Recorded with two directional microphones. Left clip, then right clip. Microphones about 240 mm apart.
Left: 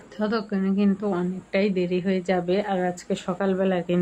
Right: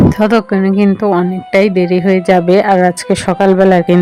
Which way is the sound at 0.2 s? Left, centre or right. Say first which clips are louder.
Right 15 dB; right.